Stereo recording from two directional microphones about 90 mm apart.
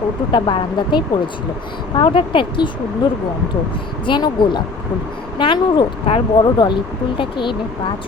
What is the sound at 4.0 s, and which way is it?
A woman's voice, 60° left (ahead or behind).